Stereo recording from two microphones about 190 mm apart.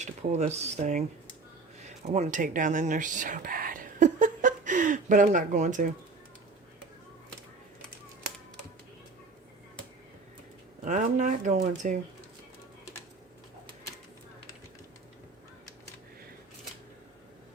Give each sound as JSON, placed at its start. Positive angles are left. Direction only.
{"t": 0.0, "sound": "speech", "side_deg": -35}
{"t": 1.8, "sound": "a sound", "side_deg": -35}
{"t": 10.8, "sound": "speech", "side_deg": -40}